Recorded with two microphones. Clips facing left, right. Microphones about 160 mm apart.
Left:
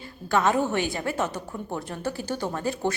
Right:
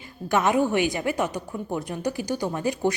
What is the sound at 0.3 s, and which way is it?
A woman's voice, 15° right (ahead or behind).